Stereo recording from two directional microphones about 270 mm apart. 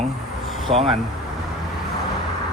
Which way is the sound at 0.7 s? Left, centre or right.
Right.